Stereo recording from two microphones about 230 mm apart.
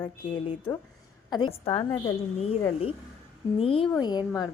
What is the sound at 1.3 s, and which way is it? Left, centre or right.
Speech, left.